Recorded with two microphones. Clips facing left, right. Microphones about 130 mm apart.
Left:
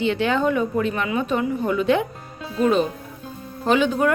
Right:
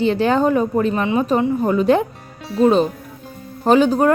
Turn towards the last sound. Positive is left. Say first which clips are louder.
# right 5 dB
turn(degrees=-35)  # may be behind; listen again after turning